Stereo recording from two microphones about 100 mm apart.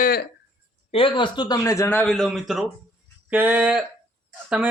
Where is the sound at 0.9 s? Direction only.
60° left (ahead or behind); by 1.8 s 35° left (ahead or behind).